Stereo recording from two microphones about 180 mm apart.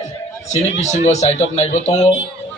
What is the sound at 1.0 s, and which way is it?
Speech, 40° left (ahead or behind).